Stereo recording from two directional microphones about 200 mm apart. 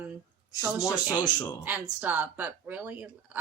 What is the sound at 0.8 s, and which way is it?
Speech, 15° left (ahead or behind).